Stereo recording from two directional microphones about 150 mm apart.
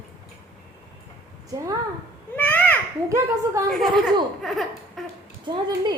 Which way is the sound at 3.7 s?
Centre (ahead or behind).